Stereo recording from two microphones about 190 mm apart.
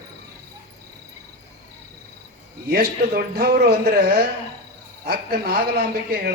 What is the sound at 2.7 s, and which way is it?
A man's voice, 55° right (ahead or behind).